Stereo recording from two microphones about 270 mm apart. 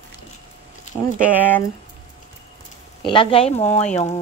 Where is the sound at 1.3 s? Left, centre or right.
Centre.